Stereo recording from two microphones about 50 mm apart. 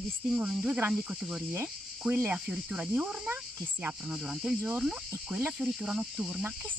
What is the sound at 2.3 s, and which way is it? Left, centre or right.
Speech, right.